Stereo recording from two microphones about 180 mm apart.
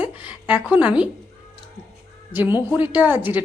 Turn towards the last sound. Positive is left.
turn(degrees=-10)  # may be behind; listen again after turning